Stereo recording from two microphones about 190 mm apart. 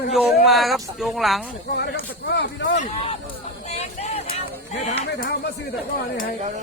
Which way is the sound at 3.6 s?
35° left (ahead or behind).